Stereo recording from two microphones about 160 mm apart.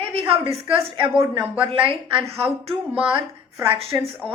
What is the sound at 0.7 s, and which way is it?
A woman's voice, 35° right (ahead or behind).